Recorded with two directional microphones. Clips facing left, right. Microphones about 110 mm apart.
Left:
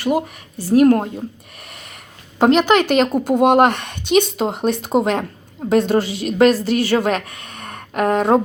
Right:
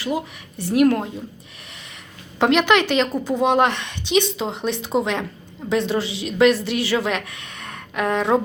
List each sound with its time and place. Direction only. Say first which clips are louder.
0.0 s speech: left 6 dB; 55° left (ahead or behind)
0.6 s a woman's voice: left 4 dB; 35° left (ahead or behind)
1.7 s snort: left 3 dB; 50° left (ahead or behind)
2.4 s a woman's voice: left 3 dB; 40° left (ahead or behind)